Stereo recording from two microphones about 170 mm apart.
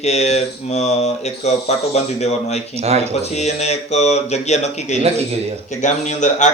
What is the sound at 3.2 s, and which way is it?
A man's voice, 40° left (ahead or behind).